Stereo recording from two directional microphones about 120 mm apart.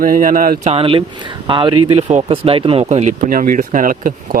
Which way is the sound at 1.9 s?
55° right (ahead or behind).